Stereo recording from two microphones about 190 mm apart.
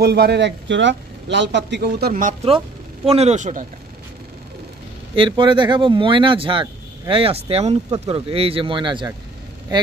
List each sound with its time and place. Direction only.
0.0 s a man's voice: 60° right (ahead or behind)
3.1 s a man's voice: 35° right (ahead or behind)
5.1 s speech: 25° right (ahead or behind)